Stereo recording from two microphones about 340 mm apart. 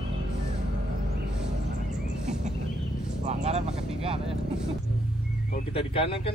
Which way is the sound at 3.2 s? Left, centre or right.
Centre.